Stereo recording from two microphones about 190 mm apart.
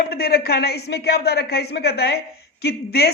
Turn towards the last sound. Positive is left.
turn(degrees=55)  # may be behind; listen again after turning